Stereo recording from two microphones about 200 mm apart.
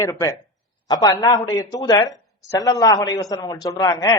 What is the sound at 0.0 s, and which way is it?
A woman's voice, 15° left (ahead or behind).